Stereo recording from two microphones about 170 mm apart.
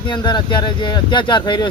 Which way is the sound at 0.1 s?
25° left (ahead or behind).